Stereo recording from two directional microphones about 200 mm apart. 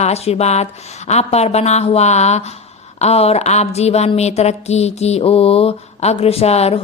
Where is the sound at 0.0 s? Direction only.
30° left (ahead or behind).